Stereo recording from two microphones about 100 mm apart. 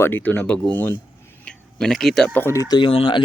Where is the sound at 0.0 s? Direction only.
20° left (ahead or behind).